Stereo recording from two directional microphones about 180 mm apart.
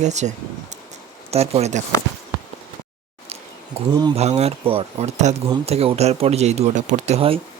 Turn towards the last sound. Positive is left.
turn(degrees=-35)  # may be behind; listen again after turning